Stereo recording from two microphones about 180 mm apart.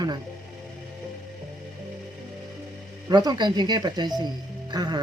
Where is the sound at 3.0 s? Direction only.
20° right (ahead or behind).